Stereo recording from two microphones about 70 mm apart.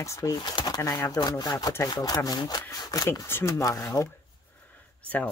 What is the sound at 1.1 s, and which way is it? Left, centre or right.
Speech, left.